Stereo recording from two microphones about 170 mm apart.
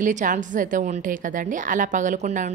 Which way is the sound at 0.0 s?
50° right (ahead or behind).